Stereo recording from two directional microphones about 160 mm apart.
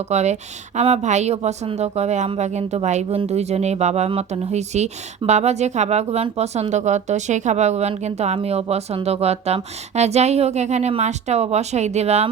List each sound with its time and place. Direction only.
0.1 s speech: 45° right (ahead or behind)